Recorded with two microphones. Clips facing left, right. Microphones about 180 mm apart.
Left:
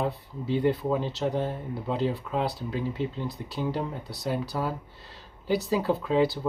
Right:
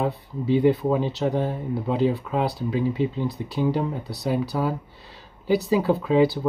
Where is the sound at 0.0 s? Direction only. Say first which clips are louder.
Right 4 dB; 5° right (ahead or behind).